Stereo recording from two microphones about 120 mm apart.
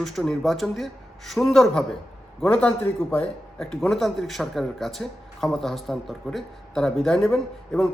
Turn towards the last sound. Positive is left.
turn(degrees=5)  # may be behind; listen again after turning